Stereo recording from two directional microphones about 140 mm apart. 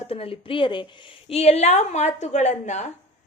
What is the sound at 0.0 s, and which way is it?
Speech, 45° left (ahead or behind).